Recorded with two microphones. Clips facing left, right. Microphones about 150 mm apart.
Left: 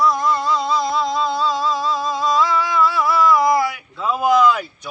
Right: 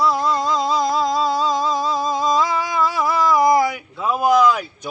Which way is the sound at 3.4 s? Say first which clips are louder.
Right 2 dB; 20° right (ahead or behind).